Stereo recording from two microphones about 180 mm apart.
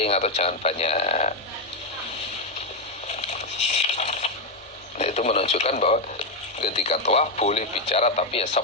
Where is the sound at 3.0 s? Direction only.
35° left (ahead or behind).